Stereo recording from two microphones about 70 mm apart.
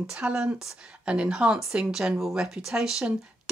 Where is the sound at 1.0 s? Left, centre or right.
Centre.